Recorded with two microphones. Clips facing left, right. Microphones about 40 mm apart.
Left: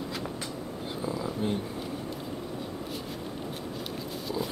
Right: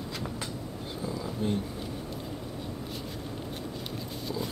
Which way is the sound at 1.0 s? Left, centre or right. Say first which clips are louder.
Left 1 dB; centre.